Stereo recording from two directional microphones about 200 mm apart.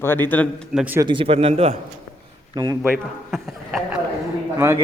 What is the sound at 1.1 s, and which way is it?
Speech, 25° right (ahead or behind).